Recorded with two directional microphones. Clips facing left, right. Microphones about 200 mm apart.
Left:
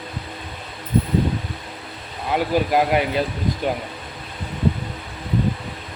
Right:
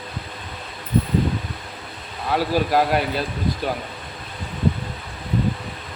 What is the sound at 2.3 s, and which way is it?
Speech, 15° left (ahead or behind).